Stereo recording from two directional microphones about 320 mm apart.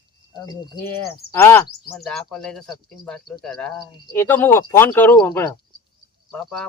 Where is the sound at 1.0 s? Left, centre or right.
Left.